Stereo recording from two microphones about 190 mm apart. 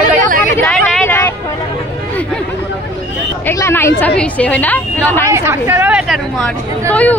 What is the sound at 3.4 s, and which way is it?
A woman's voice, 10° left (ahead or behind).